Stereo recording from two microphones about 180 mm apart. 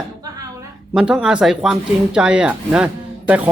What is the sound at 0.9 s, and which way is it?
Speech, 5° right (ahead or behind).